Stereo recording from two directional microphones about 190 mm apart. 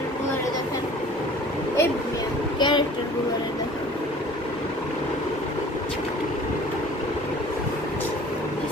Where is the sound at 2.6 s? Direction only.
25° left (ahead or behind).